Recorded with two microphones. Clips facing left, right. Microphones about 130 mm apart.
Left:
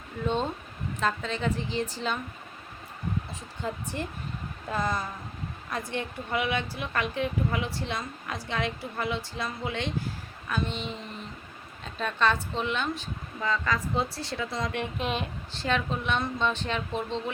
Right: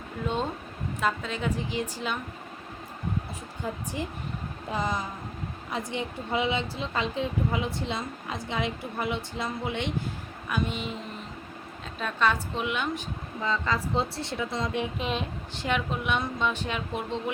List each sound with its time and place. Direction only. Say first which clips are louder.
0.9 s speech: even; 5° right (ahead or behind)
3.9 s speech: right 1 dB; 10° right (ahead or behind)
10.5 s speech: right 1 dB; 10° right (ahead or behind)
11.9 s speech: even; 5° right (ahead or behind); by 14.7 s 20° right (ahead or behind)
14.8 s speech: right 1 dB; centre (ahead or behind)
15.5 s speech: even; 15° right (ahead or behind)